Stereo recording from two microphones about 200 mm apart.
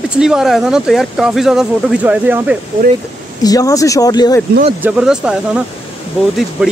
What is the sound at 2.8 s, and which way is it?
Speech, 50° right (ahead or behind).